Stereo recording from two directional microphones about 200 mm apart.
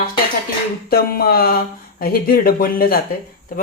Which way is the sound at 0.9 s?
50° left (ahead or behind).